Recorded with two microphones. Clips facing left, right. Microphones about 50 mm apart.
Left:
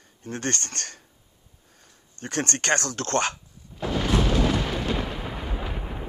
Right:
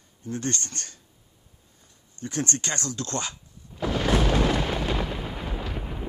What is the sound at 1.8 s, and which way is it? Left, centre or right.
Speech, left.